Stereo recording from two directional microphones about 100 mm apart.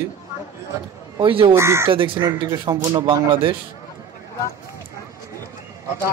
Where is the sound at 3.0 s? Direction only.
60° right (ahead or behind).